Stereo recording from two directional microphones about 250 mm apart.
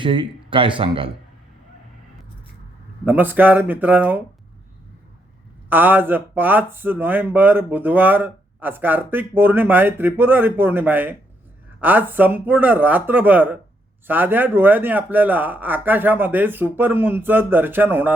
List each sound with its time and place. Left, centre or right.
0.0 s speech: centre
3.0 s speech: centre
5.6 s speech: centre